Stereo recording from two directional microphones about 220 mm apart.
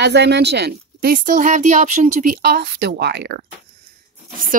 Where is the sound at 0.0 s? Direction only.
50° right (ahead or behind).